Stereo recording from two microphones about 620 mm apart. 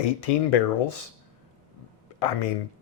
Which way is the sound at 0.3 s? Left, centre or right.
Left.